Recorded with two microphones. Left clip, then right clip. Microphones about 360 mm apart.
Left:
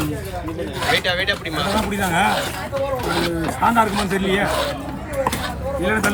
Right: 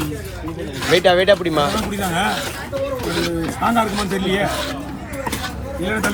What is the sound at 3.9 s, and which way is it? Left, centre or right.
Speech, left.